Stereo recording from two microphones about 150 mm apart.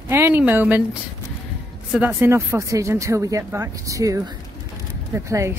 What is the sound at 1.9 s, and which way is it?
Speech, 10° right (ahead or behind).